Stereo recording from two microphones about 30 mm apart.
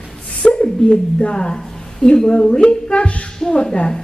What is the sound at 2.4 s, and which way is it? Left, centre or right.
Speech, left.